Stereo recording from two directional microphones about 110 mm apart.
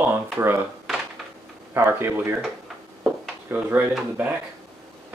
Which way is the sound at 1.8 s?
20° right (ahead or behind).